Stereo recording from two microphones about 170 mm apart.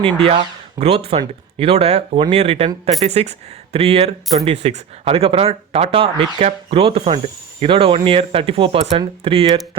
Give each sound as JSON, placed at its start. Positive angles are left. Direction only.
{"t": 0.0, "sound": "speech", "side_deg": -35}